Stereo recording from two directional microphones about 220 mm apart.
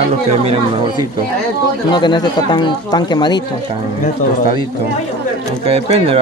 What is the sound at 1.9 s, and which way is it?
Speech, 20° left (ahead or behind).